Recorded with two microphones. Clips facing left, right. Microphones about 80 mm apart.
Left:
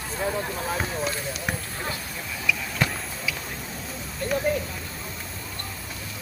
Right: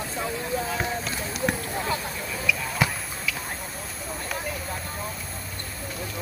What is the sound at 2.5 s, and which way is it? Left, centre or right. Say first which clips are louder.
Basketball bounce: even; centre.